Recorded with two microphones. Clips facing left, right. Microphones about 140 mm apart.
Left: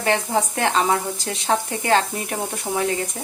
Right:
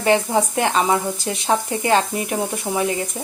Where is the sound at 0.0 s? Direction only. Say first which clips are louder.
Right 3 dB; 15° right (ahead or behind).